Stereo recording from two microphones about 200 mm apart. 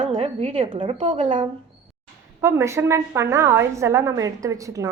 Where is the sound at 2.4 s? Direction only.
15° right (ahead or behind).